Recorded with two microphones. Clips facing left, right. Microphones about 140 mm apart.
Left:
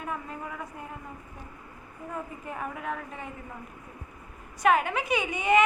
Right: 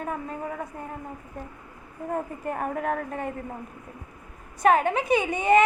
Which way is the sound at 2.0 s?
50° right (ahead or behind).